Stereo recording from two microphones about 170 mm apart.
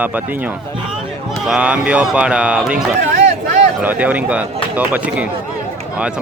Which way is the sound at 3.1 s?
45° right (ahead or behind).